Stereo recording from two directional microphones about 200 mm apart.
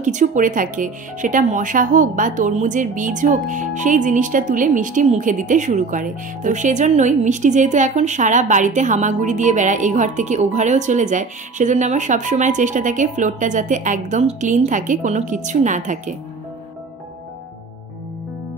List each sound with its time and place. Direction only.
0.0 s speech: 40° right (ahead or behind)